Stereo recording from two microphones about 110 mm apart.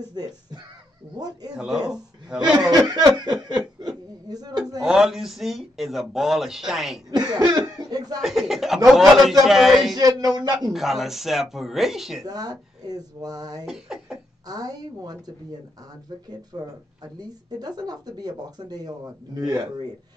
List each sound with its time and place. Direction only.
0.1 s speech: 40° right (ahead or behind)
1.5 s speech: 5° right (ahead or behind)
2.7 s speech: 35° right (ahead or behind)
3.4 s chuckle: 40° right (ahead or behind)
4.7 s speech: 5° right (ahead or behind)
7.1 s speech: 40° right (ahead or behind)
8.2 s speech: centre (ahead or behind)
9.9 s speech: 35° right (ahead or behind)
10.7 s speech: centre (ahead or behind)
12.3 s speech: 35° right (ahead or behind)
13.7 s speech: 5° right (ahead or behind)
14.5 s speech: 35° right (ahead or behind)